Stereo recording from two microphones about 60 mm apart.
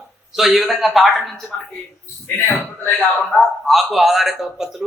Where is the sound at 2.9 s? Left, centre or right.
Centre.